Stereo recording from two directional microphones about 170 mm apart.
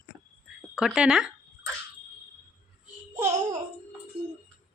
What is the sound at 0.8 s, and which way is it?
Speech, 5° right (ahead or behind).